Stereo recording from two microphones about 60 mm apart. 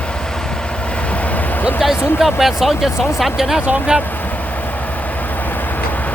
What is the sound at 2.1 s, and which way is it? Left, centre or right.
Speech, centre.